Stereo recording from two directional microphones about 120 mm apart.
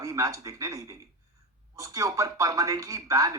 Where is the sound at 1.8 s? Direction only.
25° right (ahead or behind).